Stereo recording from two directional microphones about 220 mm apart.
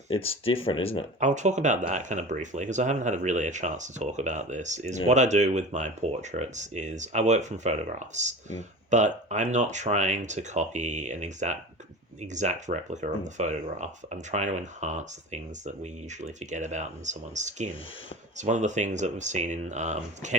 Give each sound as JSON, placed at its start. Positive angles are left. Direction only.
{"t": 0.1, "sound": "speech", "side_deg": 25}
{"t": 1.2, "sound": "speech", "side_deg": -35}